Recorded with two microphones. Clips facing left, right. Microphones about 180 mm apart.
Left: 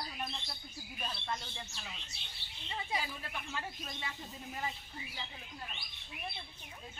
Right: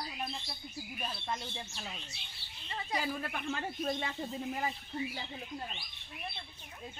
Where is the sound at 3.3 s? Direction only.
55° right (ahead or behind).